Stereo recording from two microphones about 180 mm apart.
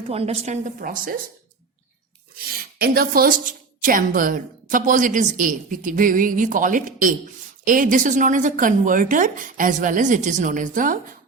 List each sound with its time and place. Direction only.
0.1 s a woman's voice: 35° right (ahead or behind)
2.5 s a woman's voice: 55° right (ahead or behind)